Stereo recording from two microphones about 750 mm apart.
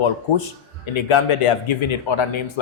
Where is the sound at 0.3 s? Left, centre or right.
Left.